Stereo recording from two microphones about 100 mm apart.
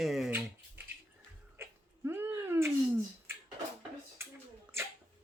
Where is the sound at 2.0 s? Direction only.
25° right (ahead or behind).